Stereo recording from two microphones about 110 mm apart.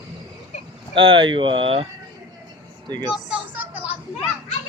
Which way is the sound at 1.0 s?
55° right (ahead or behind).